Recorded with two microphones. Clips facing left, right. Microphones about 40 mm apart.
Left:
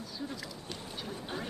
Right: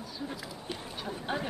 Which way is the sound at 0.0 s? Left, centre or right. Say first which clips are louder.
Right 1 dB; centre.